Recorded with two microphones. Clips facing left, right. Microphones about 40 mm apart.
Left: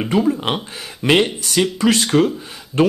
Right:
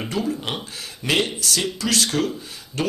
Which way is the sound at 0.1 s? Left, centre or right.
Left.